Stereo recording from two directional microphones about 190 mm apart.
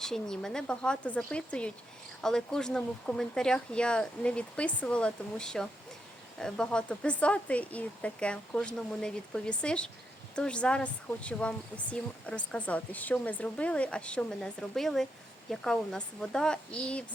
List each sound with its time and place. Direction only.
0.0 s a woman's voice: 5° left (ahead or behind)